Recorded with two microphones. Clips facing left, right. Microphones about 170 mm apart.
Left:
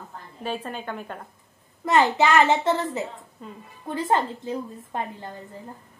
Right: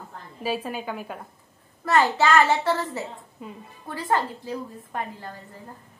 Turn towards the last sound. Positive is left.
turn(degrees=20)  # may be behind; listen again after turning